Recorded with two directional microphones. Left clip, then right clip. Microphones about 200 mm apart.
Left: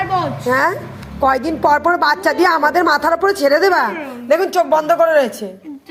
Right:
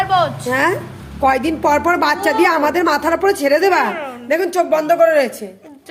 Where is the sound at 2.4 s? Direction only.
Centre (ahead or behind).